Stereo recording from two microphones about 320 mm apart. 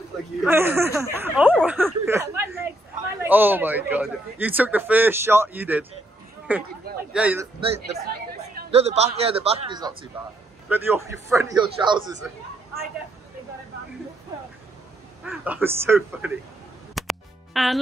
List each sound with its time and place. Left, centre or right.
0.4 s a man's voice: centre
8.6 s a man's voice: centre
15.2 s speech: centre
16.9 s music: centre